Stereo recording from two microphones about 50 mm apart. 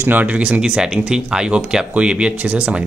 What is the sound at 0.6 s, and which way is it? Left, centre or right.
A man's voice, centre.